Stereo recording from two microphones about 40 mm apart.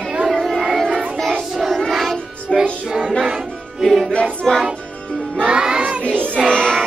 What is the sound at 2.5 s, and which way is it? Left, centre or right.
Music, centre.